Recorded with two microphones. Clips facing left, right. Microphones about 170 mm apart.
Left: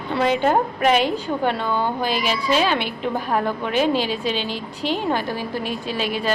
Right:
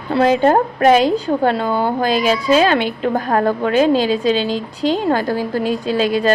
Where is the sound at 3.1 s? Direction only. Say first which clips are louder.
Right 6 dB; 45° right (ahead or behind).